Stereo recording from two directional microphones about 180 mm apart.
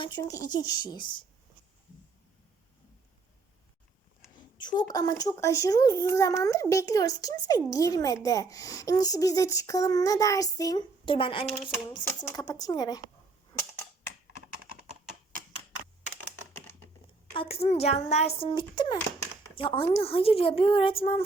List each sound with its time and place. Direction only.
0.0 s a child's voice: 20° left (ahead or behind)
4.5 s a child's voice: 25° left (ahead or behind)
11.9 s a child's voice: 15° left (ahead or behind)
17.3 s a child's voice: 30° left (ahead or behind)